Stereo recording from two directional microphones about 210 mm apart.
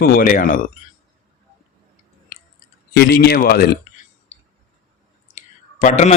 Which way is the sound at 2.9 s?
50° left (ahead or behind).